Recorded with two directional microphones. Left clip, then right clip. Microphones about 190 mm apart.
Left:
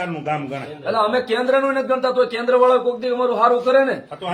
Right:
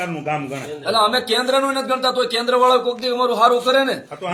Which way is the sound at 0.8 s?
Centre (ahead or behind).